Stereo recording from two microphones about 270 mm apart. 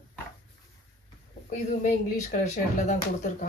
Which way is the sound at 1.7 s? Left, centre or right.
Left.